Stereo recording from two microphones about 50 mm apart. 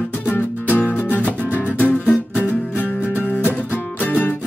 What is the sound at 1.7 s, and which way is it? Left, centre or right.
Music, left.